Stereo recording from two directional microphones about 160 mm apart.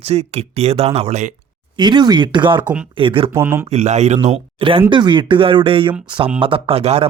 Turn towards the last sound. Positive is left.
turn(degrees=-40)  # may be behind; listen again after turning